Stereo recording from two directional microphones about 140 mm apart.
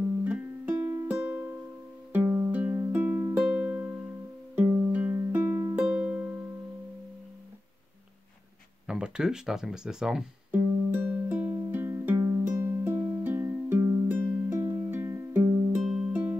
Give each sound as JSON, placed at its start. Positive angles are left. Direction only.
{"t": 0.2, "sound": "music", "side_deg": -10}
{"t": 8.8, "sound": "music", "side_deg": -5}
{"t": 15.8, "sound": "music", "side_deg": -5}
{"t": 16.1, "sound": "music", "side_deg": -15}